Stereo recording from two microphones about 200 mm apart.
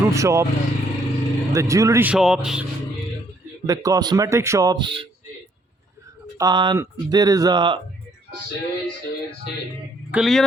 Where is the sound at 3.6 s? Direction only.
15° right (ahead or behind).